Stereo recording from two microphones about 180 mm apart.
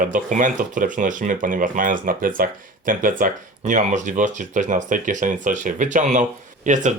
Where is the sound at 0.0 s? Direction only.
45° right (ahead or behind).